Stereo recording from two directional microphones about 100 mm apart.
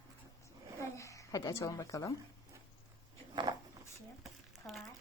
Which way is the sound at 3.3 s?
50° right (ahead or behind).